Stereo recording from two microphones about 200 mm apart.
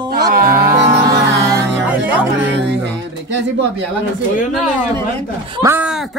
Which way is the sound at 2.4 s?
60° right (ahead or behind).